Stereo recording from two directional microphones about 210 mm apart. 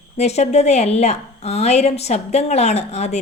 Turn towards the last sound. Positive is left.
turn(degrees=30)  # may be behind; listen again after turning